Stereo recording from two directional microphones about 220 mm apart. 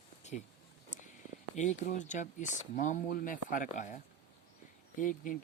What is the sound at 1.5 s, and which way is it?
Speech, 35° left (ahead or behind).